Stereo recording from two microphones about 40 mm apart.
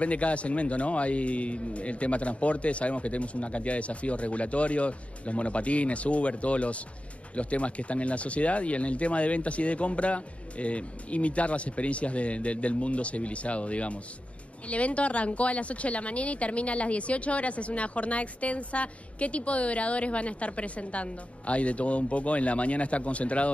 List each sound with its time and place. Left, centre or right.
0.0 s speech: left